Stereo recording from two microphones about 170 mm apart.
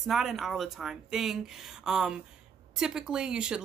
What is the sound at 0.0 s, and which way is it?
Speech, centre (ahead or behind).